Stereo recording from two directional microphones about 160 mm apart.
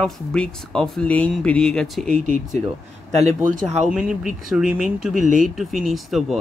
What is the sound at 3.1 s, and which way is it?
Speech, 45° right (ahead or behind).